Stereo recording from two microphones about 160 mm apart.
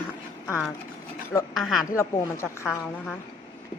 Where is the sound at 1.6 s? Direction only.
Centre (ahead or behind).